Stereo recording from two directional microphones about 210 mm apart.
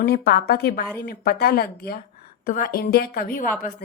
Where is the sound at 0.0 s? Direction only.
45° left (ahead or behind).